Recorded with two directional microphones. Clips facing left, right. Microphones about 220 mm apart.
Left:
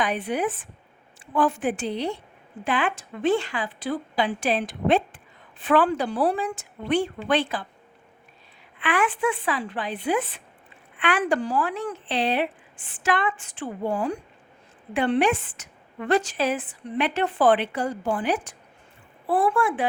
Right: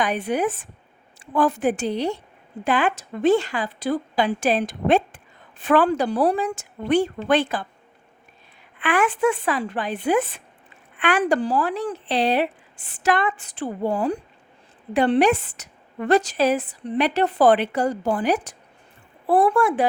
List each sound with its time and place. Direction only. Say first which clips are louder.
0.0 s a woman's voice: right 3 dB; 45° right (ahead or behind)
8.8 s a woman's voice: right 4 dB; 45° right (ahead or behind)